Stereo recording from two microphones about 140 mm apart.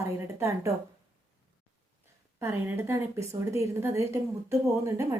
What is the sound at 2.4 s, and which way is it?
A woman's voice, 15° right (ahead or behind).